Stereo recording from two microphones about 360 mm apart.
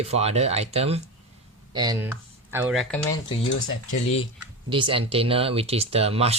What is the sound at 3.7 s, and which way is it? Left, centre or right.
Speech, left.